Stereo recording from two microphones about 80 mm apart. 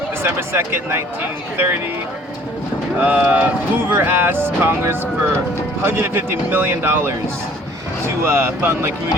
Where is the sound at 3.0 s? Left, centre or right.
Centre.